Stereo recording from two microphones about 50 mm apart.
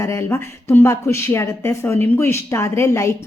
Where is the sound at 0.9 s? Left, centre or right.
Left.